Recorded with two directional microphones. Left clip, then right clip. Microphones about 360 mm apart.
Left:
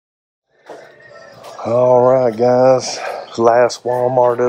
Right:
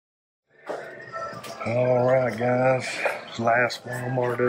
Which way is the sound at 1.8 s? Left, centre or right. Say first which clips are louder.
Left 10 dB; left.